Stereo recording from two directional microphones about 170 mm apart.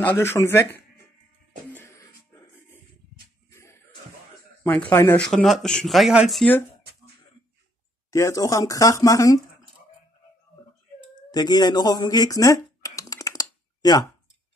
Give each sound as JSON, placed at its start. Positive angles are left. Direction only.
{"t": 0.0, "sound": "speech", "side_deg": 10}
{"t": 1.7, "sound": "music", "side_deg": 10}
{"t": 3.4, "sound": "music", "side_deg": 15}
{"t": 4.6, "sound": "speech", "side_deg": 10}
{"t": 5.2, "sound": "speech", "side_deg": 0}
{"t": 8.1, "sound": "speech", "side_deg": 20}
{"t": 11.3, "sound": "typing", "side_deg": 25}